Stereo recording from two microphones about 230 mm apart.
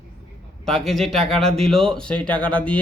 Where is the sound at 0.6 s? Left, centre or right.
Centre.